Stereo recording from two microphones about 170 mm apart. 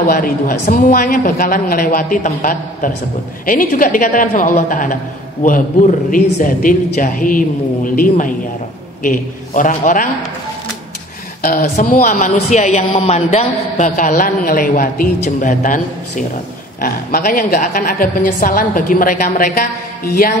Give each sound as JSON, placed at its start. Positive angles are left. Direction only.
{"t": 0.0, "sound": "a woman's voice", "side_deg": 55}
{"t": 11.4, "sound": "a man's voice", "side_deg": 50}